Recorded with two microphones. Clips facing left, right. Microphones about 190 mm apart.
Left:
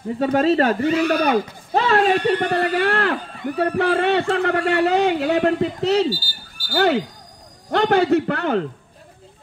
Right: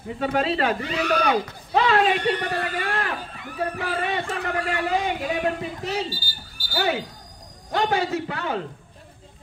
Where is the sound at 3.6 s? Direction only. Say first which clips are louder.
Left 8 dB; 70° left (ahead or behind).